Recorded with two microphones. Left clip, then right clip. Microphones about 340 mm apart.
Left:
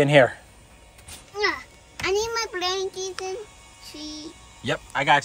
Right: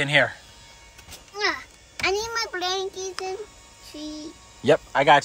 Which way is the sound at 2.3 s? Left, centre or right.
Centre.